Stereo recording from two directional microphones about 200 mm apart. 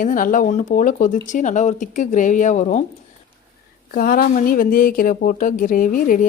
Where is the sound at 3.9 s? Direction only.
45° left (ahead or behind).